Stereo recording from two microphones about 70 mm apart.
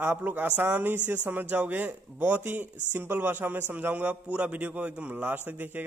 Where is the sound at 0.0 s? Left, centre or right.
Right.